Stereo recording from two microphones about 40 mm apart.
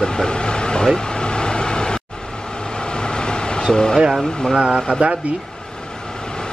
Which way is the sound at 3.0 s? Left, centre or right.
Left.